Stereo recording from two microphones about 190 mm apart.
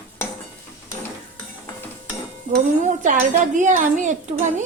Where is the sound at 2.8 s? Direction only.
45° right (ahead or behind).